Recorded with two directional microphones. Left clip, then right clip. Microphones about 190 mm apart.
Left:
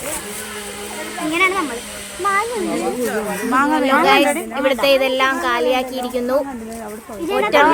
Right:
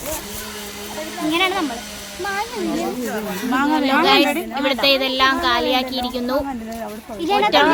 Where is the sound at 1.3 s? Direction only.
50° right (ahead or behind).